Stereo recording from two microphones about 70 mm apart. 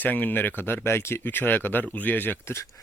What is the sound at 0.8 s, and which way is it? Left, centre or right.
Speech, left.